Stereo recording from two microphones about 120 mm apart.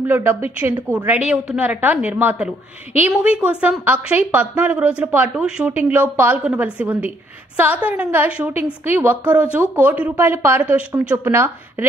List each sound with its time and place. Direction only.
0.0 s a woman's voice: 15° right (ahead or behind)